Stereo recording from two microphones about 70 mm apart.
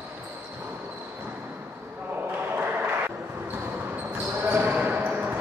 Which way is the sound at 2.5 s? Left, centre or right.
Right.